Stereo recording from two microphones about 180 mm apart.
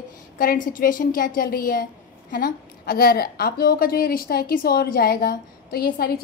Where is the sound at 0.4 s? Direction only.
50° left (ahead or behind).